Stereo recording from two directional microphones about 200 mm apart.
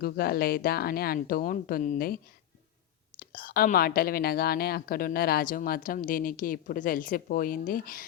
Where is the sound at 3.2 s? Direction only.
45° left (ahead or behind).